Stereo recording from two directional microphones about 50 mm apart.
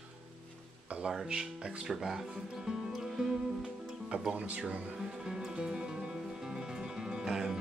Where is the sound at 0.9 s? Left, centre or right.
Right.